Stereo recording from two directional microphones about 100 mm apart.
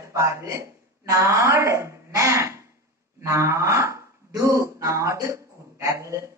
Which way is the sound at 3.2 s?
25° right (ahead or behind).